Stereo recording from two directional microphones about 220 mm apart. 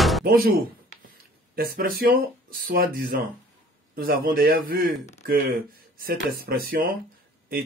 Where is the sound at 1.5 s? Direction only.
45° right (ahead or behind).